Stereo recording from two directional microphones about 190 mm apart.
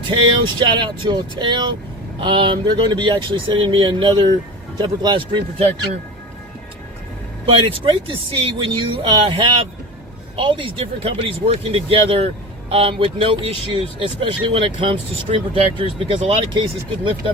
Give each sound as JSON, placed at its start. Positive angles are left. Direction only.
{"t": 0.1, "sound": "speech", "side_deg": -25}
{"t": 7.7, "sound": "speech", "side_deg": -25}